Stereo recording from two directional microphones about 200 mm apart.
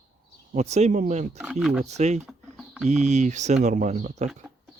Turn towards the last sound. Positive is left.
turn(degrees=-35)  # may be behind; listen again after turning